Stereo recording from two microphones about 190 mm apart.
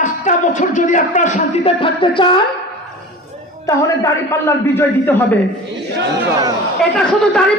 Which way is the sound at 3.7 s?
15° left (ahead or behind).